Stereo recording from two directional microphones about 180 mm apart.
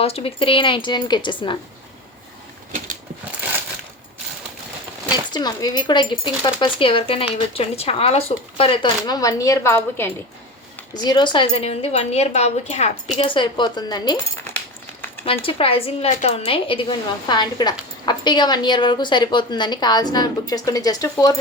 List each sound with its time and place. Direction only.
0.0 s speech: 35° left (ahead or behind)
2.7 s a sound: 45° right (ahead or behind)
5.3 s a woman's voice: 20° left (ahead or behind)
15.2 s a woman's voice: 30° left (ahead or behind)